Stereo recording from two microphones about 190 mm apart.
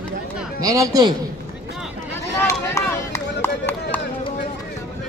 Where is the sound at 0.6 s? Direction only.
20° right (ahead or behind).